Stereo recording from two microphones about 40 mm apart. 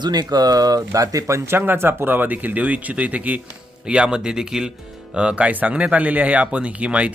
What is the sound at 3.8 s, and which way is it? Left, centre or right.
Speech, right.